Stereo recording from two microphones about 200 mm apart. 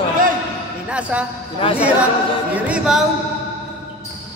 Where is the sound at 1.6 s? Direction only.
25° left (ahead or behind).